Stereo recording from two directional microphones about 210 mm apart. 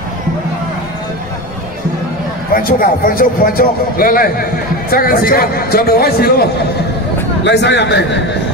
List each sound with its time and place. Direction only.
2.5 s a man's voice: 45° left (ahead or behind)
7.4 s a man's voice: 55° left (ahead or behind)